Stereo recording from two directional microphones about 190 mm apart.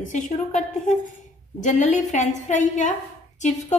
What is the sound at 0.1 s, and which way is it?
A woman's voice, 40° left (ahead or behind).